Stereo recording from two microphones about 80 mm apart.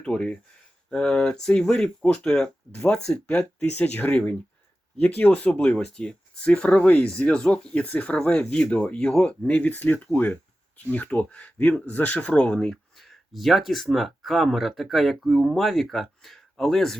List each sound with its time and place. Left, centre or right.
0.0 s speech: centre
3.8 s speech: left; by 17.0 s centre